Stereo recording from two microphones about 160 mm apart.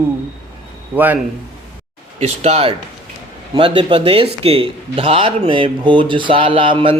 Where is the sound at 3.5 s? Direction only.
30° right (ahead or behind).